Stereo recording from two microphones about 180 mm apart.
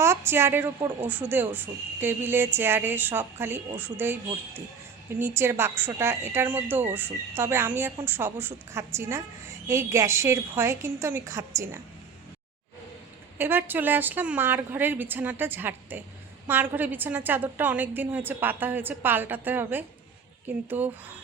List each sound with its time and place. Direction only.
0.0 s speech: 15° right (ahead or behind)
5.2 s speech: 15° right (ahead or behind)
13.4 s speech: 10° right (ahead or behind)